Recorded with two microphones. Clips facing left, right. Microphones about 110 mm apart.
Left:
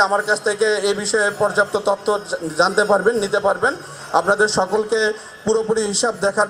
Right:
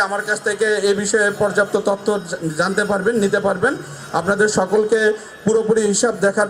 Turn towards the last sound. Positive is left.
turn(degrees=25)  # may be behind; listen again after turning